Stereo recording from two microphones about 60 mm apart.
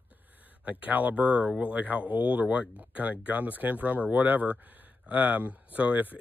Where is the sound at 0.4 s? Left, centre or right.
Right.